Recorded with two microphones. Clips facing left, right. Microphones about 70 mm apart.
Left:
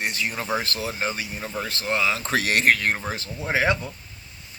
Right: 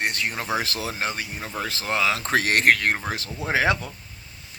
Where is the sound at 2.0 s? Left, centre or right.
Right.